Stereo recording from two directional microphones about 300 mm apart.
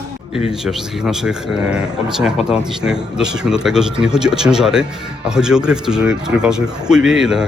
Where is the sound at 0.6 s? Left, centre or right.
Centre.